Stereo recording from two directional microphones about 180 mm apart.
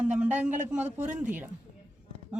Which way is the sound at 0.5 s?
40° right (ahead or behind).